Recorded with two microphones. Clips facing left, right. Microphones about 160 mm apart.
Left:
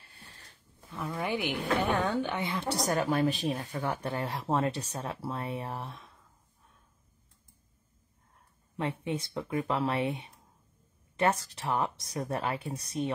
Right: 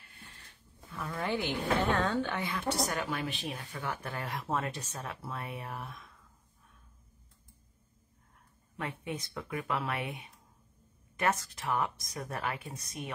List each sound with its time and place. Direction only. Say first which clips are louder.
0.0 s a sound: even; 35° left (ahead or behind)
0.9 s speech: left 1 dB; 15° left (ahead or behind)
2.7 s speech: left 6 dB; 35° left (ahead or behind)
8.7 s speech: left 5 dB; 25° left (ahead or behind)